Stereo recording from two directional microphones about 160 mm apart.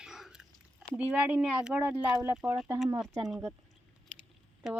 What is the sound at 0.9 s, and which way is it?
Speech, 10° right (ahead or behind).